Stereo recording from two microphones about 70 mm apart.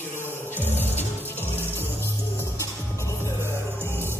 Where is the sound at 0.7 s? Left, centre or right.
Left.